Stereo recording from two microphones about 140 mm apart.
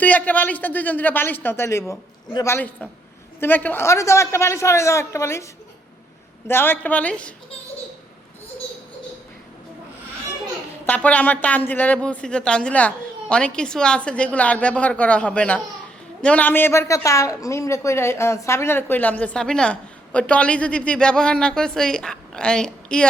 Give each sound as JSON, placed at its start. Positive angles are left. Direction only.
{"t": 0.0, "sound": "a woman's voice", "side_deg": 10}
{"t": 6.5, "sound": "a woman's voice", "side_deg": 15}
{"t": 10.8, "sound": "a woman's voice", "side_deg": 10}